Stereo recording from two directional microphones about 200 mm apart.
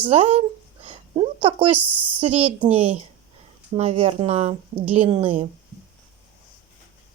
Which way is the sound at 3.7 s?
30° right (ahead or behind).